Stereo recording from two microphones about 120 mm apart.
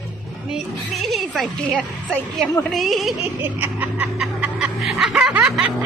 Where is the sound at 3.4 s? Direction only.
15° right (ahead or behind).